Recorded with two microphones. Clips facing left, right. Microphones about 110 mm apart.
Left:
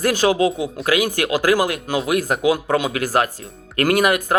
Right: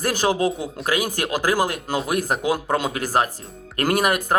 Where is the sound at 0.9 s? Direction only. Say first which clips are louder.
Left 4 dB; 35° right (ahead or behind).